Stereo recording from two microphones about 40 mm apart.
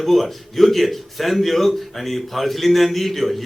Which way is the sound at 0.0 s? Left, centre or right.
Centre.